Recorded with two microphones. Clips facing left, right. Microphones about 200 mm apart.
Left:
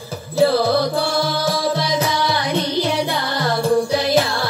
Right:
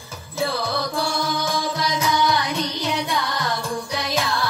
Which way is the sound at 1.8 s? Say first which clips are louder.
Left 2 dB; 30° left (ahead or behind).